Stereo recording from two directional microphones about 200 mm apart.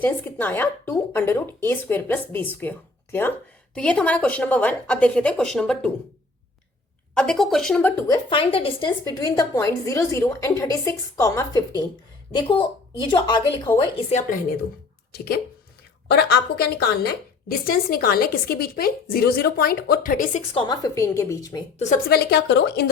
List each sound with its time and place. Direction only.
0.0 s a woman's voice: 10° left (ahead or behind)
7.1 s speech: 5° left (ahead or behind)
8.0 s a woman's voice: 20° left (ahead or behind)
14.1 s a woman's voice: 40° left (ahead or behind)
15.1 s a woman's voice: 50° left (ahead or behind)
20.5 s a woman's voice: 25° left (ahead or behind)
21.8 s a woman's voice: 40° left (ahead or behind)